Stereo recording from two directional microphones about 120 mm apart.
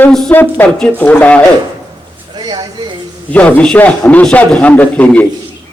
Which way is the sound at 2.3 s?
35° right (ahead or behind).